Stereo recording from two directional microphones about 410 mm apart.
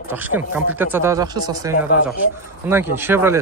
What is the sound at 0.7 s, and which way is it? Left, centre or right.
Speech, centre.